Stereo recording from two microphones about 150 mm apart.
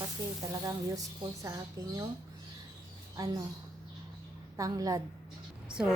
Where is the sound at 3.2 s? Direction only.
25° right (ahead or behind).